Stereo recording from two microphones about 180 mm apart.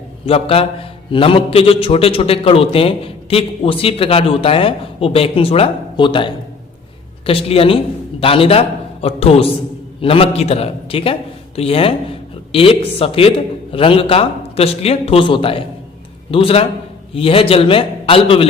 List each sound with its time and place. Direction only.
0.3 s a man's voice: 30° left (ahead or behind)